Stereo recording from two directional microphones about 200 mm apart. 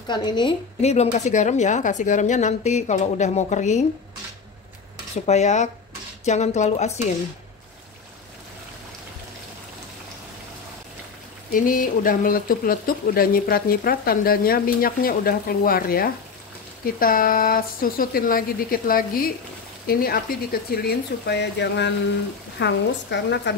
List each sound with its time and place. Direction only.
0.1 s a woman's voice: 20° left (ahead or behind)
5.1 s a woman's voice: 35° left (ahead or behind)
11.5 s speech: 45° left (ahead or behind); by 23.5 s 60° left (ahead or behind)